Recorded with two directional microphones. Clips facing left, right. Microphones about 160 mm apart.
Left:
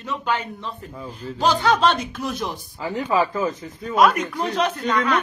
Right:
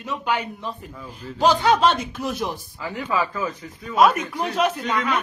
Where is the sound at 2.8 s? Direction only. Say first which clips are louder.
Left 4 dB; 30° left (ahead or behind).